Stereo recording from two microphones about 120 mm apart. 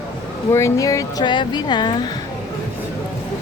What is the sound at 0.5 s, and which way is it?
Speech, 25° left (ahead or behind).